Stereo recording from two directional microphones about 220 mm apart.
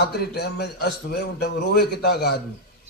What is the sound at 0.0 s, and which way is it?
A man's voice, 45° left (ahead or behind).